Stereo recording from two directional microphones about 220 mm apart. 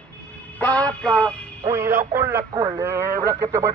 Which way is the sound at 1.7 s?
10° right (ahead or behind).